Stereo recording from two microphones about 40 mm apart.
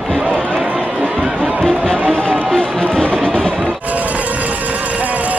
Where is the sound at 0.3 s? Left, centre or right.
Left.